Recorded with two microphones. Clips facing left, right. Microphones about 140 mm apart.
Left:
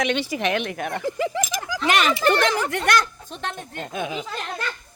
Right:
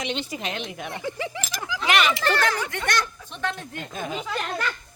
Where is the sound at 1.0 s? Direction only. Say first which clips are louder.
Left 6 dB; 40° left (ahead or behind).